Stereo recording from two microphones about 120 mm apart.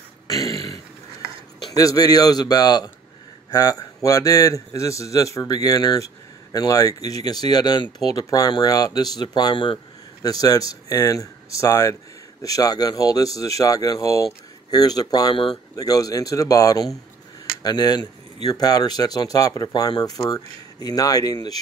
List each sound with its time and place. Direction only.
0.3 s a sound: 30° left (ahead or behind)
1.8 s a man's voice: 30° left (ahead or behind)
10.2 s a man's voice: 30° left (ahead or behind)